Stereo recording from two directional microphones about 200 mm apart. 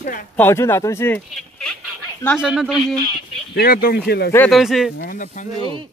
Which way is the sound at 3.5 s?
50° left (ahead or behind).